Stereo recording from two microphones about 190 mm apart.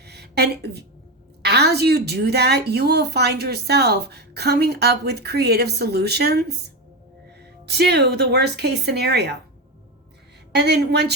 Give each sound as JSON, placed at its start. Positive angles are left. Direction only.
{"t": 0.0, "sound": "a sound", "side_deg": -60}
{"t": 1.4, "sound": "a woman's voice", "side_deg": -60}
{"t": 7.7, "sound": "a woman's voice", "side_deg": -60}
{"t": 10.5, "sound": "a woman's voice", "side_deg": -60}